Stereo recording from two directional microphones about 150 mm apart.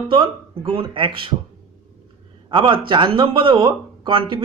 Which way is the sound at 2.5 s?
35° right (ahead or behind).